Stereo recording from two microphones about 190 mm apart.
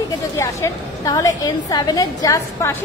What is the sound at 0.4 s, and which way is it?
A woman's voice, 15° left (ahead or behind).